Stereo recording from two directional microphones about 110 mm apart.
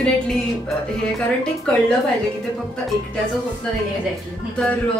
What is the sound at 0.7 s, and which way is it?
Speech, 5° left (ahead or behind).